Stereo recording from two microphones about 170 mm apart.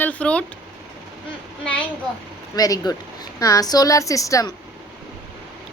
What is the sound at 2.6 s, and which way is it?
A woman's voice, 20° left (ahead or behind).